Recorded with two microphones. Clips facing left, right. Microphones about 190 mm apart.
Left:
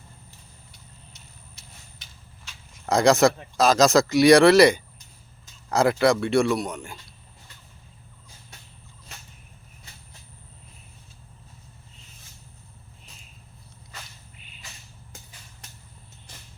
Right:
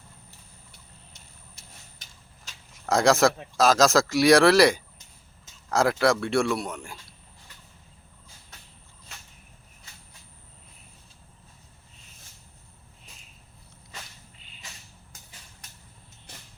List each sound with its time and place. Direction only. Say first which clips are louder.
1.1 s vehicle: left 2 dB; 45° right (ahead or behind)
2.8 s a man's voice: left 2 dB; centre (ahead or behind)